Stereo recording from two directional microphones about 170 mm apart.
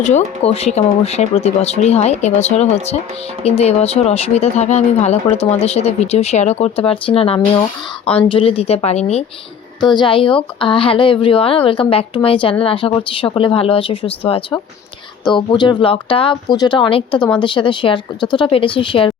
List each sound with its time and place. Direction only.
0.4 s speech: 35° left (ahead or behind)
9.8 s speech: 25° left (ahead or behind)